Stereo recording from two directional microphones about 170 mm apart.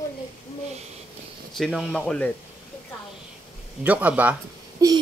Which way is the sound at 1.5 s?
Centre (ahead or behind).